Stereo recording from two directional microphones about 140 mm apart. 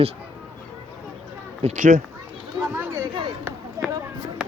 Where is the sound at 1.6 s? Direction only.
60° right (ahead or behind).